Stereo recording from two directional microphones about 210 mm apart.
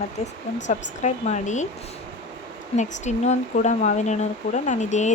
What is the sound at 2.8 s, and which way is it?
Speech, 35° left (ahead or behind).